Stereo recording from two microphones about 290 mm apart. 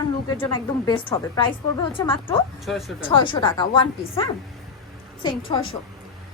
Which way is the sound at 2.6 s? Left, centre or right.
Centre.